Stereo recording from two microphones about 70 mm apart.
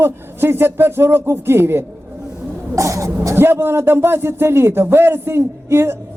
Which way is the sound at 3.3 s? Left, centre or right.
Right.